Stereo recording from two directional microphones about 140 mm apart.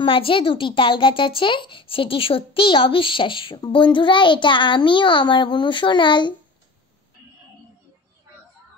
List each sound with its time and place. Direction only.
0.0 s a woman's voice: 40° left (ahead or behind)